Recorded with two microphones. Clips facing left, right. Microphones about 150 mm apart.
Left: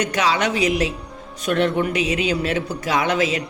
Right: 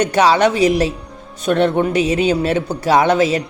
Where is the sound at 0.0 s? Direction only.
35° right (ahead or behind).